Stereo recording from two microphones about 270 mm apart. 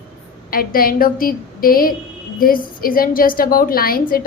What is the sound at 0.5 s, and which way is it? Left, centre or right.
A woman's voice, left.